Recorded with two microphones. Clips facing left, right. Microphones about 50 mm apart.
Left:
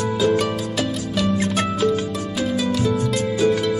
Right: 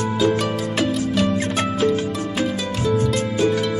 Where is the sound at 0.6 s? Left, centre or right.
Right.